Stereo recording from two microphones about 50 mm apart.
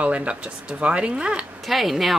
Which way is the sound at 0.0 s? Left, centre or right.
Right.